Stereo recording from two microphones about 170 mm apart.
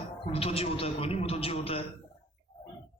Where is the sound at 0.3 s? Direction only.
35° left (ahead or behind).